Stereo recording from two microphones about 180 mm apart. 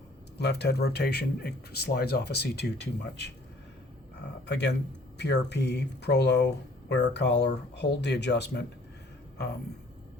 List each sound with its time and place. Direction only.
0.3 s speech: 65° left (ahead or behind)
4.4 s speech: 70° left (ahead or behind)